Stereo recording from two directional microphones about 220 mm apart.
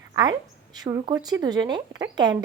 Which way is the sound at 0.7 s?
20° right (ahead or behind).